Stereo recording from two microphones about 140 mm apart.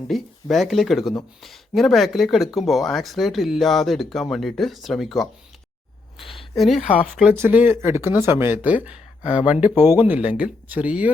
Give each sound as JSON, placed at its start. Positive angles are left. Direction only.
{"t": 0.1, "sound": "speech", "side_deg": 0}
{"t": 7.3, "sound": "speech", "side_deg": -15}